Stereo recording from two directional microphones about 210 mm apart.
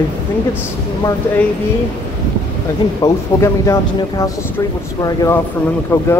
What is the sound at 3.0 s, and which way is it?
Speech, 15° left (ahead or behind).